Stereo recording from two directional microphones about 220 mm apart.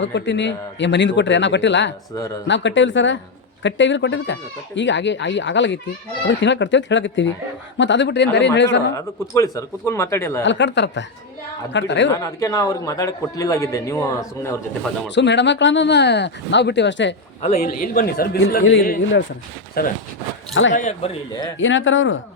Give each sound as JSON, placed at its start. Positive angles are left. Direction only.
{"t": 0.0, "sound": "speech", "side_deg": 55}
{"t": 9.3, "sound": "a man's voice", "side_deg": 15}
{"t": 10.4, "sound": "speech", "side_deg": 55}
{"t": 12.2, "sound": "a man's voice", "side_deg": 15}
{"t": 15.1, "sound": "speech", "side_deg": 50}
{"t": 17.4, "sound": "a man's voice", "side_deg": 35}
{"t": 19.8, "sound": "speech", "side_deg": 45}
{"t": 20.5, "sound": "speech", "side_deg": 60}
{"t": 20.7, "sound": "a man's voice", "side_deg": 30}
{"t": 21.6, "sound": "speech", "side_deg": 60}